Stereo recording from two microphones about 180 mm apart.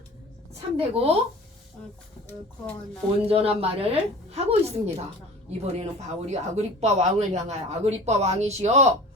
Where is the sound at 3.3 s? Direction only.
35° right (ahead or behind).